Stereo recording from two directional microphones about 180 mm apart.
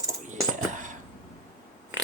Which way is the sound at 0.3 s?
45° right (ahead or behind).